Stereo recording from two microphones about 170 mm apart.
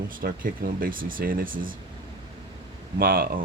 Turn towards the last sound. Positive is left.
turn(degrees=-60)  # may be behind; listen again after turning